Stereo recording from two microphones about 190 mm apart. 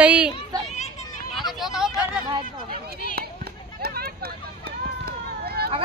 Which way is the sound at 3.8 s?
55° right (ahead or behind).